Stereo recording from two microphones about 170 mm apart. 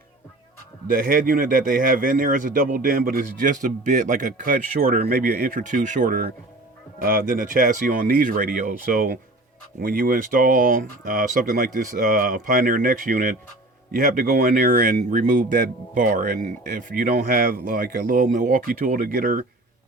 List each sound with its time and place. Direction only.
0.9 s speech: 55° right (ahead or behind)